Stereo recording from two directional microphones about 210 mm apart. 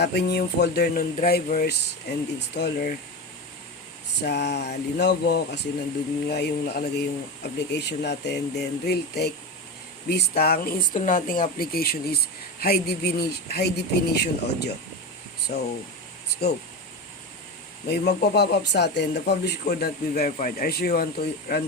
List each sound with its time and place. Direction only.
0.0 s speech: 50° left (ahead or behind)
4.2 s speech: 55° left (ahead or behind)
15.5 s speech: 40° left (ahead or behind)
17.8 s speech: 50° left (ahead or behind)